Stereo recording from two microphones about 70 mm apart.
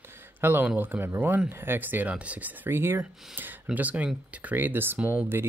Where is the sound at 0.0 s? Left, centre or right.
Right.